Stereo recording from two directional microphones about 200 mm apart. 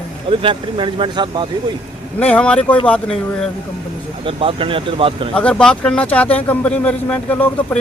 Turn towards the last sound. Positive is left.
turn(degrees=5)  # may be behind; listen again after turning